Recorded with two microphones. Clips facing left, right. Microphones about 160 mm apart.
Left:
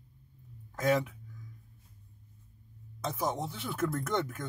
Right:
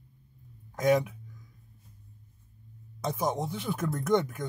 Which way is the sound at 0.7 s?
15° right (ahead or behind).